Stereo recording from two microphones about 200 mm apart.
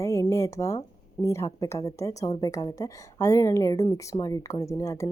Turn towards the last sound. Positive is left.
turn(degrees=15)  # may be behind; listen again after turning